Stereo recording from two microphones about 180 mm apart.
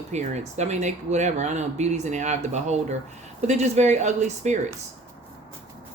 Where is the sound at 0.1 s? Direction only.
40° right (ahead or behind).